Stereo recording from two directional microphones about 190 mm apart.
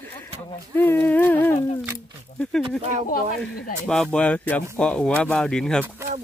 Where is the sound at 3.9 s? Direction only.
5° left (ahead or behind).